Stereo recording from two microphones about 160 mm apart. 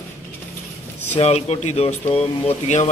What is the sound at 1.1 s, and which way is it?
Speech, 40° left (ahead or behind).